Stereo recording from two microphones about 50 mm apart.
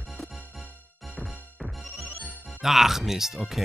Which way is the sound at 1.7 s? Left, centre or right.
Centre.